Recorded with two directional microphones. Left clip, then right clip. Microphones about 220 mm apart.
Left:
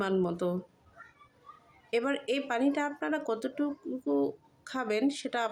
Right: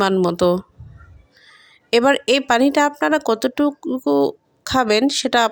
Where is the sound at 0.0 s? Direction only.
40° right (ahead or behind).